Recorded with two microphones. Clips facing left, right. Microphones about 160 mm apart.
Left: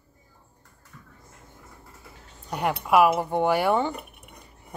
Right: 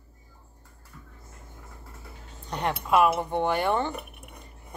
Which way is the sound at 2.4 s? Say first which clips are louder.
Left 2 dB; 10° left (ahead or behind).